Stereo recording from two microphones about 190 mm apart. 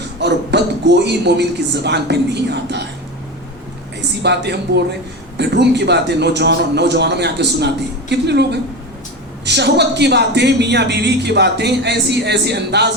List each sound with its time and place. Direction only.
0.2 s a man's voice: 60° right (ahead or behind)
4.2 s a man's voice: 60° right (ahead or behind)